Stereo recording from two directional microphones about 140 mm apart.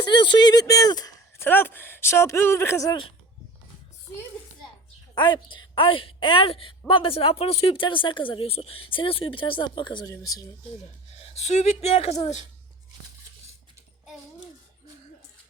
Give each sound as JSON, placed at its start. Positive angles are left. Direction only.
{"t": 0.1, "sound": "speech", "side_deg": 35}
{"t": 1.4, "sound": "speech", "side_deg": 15}
{"t": 5.1, "sound": "a woman's voice", "side_deg": 35}
{"t": 11.1, "sound": "speech", "side_deg": 50}